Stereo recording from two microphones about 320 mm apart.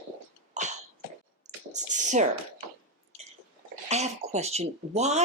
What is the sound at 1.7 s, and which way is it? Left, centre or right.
Speech, right.